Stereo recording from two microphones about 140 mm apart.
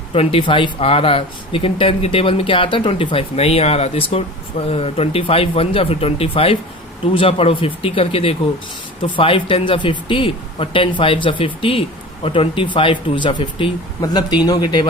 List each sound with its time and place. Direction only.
0.1 s speech: 45° left (ahead or behind)